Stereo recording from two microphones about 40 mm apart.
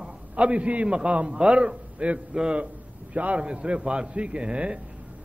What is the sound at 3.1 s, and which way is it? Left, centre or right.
A man's voice, right.